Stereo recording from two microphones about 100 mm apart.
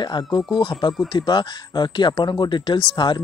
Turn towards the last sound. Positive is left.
turn(degrees=50)  # may be behind; listen again after turning